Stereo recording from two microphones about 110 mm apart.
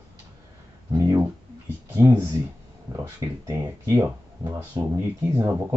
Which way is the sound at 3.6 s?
35° right (ahead or behind).